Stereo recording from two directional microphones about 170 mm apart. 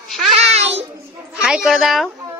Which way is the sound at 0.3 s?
40° right (ahead or behind).